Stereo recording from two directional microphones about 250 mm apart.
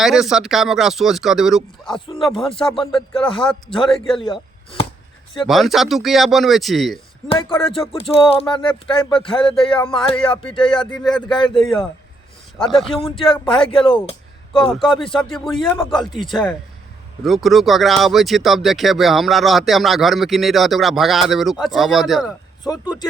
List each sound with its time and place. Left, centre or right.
0.0 s speech: centre
2.3 s speech: left
2.6 s speech: centre
2.9 s speech: centre
4.2 s chop: left
5.5 s speech: centre
7.3 s speech: left
11.6 s speech: centre
13.0 s speech: left
15.2 s speech: centre